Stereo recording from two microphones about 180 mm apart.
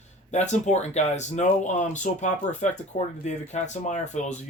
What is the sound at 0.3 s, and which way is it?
Speech, 40° left (ahead or behind).